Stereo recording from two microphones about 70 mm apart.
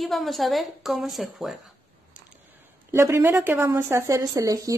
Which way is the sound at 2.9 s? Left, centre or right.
Right.